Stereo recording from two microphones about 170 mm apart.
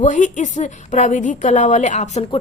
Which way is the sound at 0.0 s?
45° left (ahead or behind).